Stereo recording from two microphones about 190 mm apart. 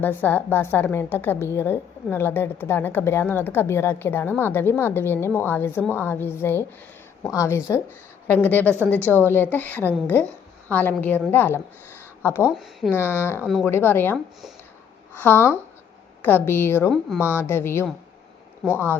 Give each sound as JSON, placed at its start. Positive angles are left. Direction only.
{"t": 0.0, "sound": "a woman's voice", "side_deg": 10}
{"t": 12.5, "sound": "speech", "side_deg": 0}
{"t": 12.9, "sound": "a woman's voice", "side_deg": 10}
{"t": 13.4, "sound": "speech", "side_deg": 0}
{"t": 13.7, "sound": "a woman's voice", "side_deg": 10}
{"t": 18.6, "sound": "speech", "side_deg": 0}